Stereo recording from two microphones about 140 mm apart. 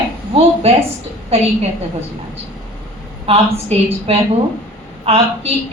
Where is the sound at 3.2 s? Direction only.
45° right (ahead or behind).